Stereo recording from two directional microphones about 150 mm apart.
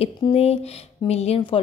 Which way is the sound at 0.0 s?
40° left (ahead or behind).